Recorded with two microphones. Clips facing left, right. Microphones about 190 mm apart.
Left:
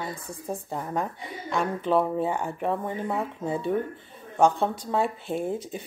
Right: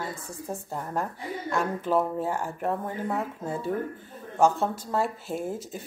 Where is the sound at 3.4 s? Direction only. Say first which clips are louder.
Left 3 dB; 20° left (ahead or behind).